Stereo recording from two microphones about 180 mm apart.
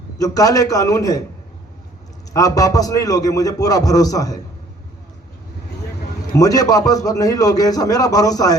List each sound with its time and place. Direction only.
0.2 s a man's voice: 20° left (ahead or behind)
2.3 s a man's voice: 20° left (ahead or behind)
6.3 s a man's voice: 20° left (ahead or behind)